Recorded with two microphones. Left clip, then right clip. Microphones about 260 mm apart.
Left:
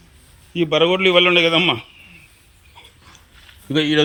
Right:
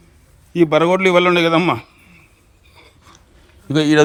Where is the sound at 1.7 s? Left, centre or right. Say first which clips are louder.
Right 1 dB; centre.